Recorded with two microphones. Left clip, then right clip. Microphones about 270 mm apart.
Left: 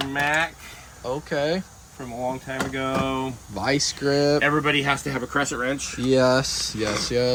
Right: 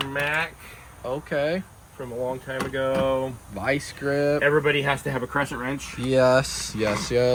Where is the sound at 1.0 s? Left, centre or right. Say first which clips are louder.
Left 1 dB; centre.